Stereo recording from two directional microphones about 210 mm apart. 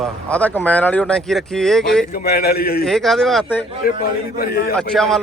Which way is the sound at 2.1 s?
45° left (ahead or behind).